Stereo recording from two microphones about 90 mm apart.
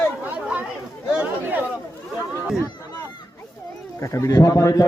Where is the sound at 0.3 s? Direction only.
20° right (ahead or behind).